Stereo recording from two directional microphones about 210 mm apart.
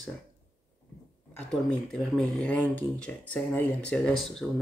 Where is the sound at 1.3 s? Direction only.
5° left (ahead or behind).